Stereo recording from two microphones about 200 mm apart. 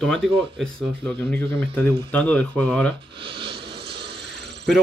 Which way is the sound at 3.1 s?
25° right (ahead or behind).